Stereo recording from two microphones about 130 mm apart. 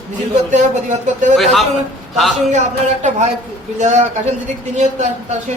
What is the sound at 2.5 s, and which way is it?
Speech, 65° right (ahead or behind).